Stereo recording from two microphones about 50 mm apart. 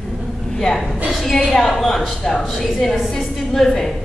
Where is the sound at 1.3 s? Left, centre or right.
Centre.